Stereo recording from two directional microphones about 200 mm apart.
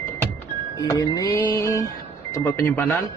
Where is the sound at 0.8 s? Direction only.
20° left (ahead or behind).